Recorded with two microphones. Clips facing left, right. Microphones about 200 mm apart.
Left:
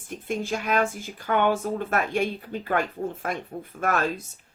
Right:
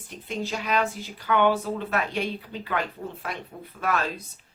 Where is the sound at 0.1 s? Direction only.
50° left (ahead or behind).